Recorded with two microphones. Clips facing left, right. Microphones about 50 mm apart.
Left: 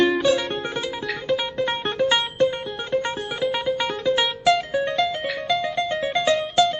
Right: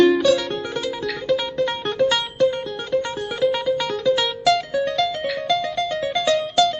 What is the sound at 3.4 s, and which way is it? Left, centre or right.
Music, centre.